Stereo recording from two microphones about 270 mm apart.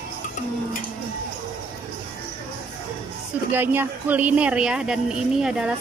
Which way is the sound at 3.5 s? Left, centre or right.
Centre.